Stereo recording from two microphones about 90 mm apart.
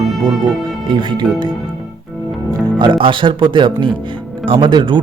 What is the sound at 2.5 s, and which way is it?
Speech, 50° right (ahead or behind).